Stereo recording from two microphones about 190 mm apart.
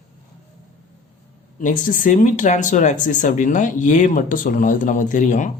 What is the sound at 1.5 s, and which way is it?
Speech, 45° left (ahead or behind).